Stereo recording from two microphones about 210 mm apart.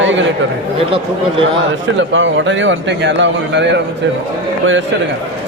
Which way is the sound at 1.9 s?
65° right (ahead or behind).